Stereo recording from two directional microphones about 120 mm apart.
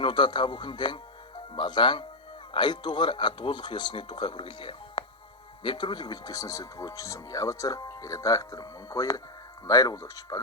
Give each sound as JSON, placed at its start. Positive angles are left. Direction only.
{"t": 0.0, "sound": "speech", "side_deg": 40}